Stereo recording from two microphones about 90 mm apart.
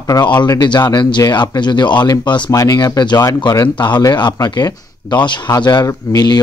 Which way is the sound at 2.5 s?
40° left (ahead or behind).